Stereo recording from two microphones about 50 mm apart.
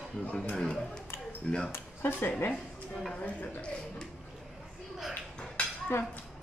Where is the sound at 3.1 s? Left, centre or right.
Left.